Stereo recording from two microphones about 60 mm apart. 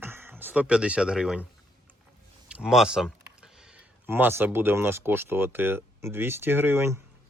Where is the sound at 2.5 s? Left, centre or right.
Centre.